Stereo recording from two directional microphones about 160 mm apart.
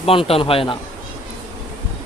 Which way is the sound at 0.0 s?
35° left (ahead or behind).